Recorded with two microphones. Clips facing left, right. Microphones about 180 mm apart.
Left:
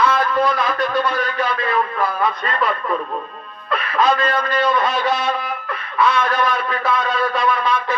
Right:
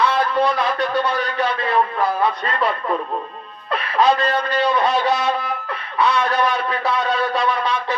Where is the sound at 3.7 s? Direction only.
35° right (ahead or behind).